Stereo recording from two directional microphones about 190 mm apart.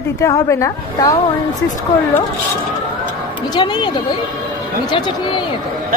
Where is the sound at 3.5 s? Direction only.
25° left (ahead or behind).